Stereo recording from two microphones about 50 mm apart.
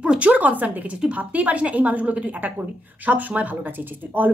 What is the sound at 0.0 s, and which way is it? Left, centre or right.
A woman's voice, right.